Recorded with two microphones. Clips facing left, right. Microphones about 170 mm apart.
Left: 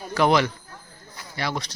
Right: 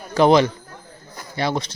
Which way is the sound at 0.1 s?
25° right (ahead or behind).